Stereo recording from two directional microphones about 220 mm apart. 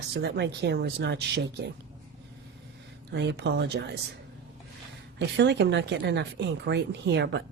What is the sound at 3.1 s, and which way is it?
Speech, 50° right (ahead or behind).